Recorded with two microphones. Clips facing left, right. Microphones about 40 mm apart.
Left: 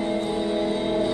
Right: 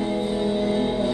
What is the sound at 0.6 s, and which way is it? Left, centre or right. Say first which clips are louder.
Music: right 2 dB; centre.